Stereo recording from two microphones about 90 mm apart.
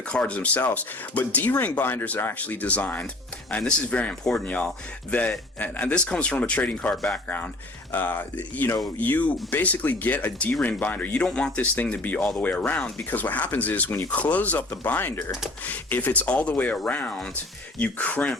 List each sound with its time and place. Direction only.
0.1 s speech: 15° left (ahead or behind)
6.9 s speech: 5° left (ahead or behind)
7.3 s speech: 15° left (ahead or behind)